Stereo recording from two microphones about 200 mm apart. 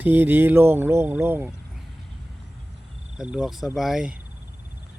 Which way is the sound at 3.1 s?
5° right (ahead or behind).